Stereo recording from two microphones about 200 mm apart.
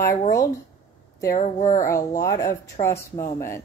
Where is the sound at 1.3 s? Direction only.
40° left (ahead or behind).